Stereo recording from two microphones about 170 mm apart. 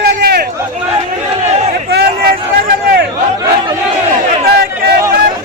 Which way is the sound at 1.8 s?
65° right (ahead or behind).